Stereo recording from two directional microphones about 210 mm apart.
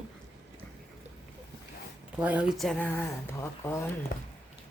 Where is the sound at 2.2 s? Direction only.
5° right (ahead or behind); by 3.8 s 10° left (ahead or behind).